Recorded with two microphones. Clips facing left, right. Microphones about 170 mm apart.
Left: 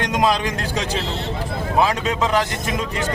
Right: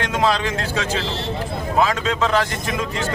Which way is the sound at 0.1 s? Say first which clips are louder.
Even; 15° left (ahead or behind).